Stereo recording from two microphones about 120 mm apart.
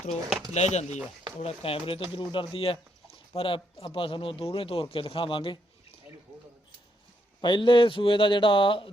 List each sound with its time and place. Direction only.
0.5 s speech: 70° left (ahead or behind)
1.4 s a man's voice: 55° left (ahead or behind)
7.4 s a man's voice: 40° left (ahead or behind)